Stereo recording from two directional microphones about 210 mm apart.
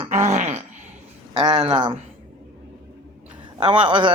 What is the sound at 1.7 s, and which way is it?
Speech, 20° right (ahead or behind).